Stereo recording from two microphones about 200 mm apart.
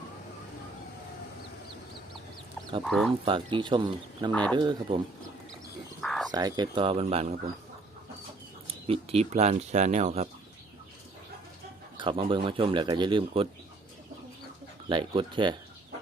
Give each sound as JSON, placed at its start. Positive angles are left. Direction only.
{"t": 2.8, "sound": "speech", "side_deg": 0}
{"t": 3.2, "sound": "speech", "side_deg": -25}
{"t": 4.3, "sound": "speech", "side_deg": 5}
{"t": 4.5, "sound": "speech", "side_deg": -20}
{"t": 6.0, "sound": "cricket", "side_deg": 0}
{"t": 6.3, "sound": "speech", "side_deg": -20}
{"t": 8.6, "sound": "speech", "side_deg": -30}
{"t": 11.9, "sound": "speech", "side_deg": -25}
{"t": 14.8, "sound": "speech", "side_deg": -25}